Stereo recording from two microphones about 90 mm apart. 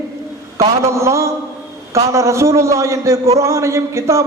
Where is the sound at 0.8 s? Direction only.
35° right (ahead or behind).